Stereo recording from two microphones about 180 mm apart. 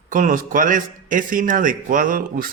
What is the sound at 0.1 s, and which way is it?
A man's voice, 45° right (ahead or behind).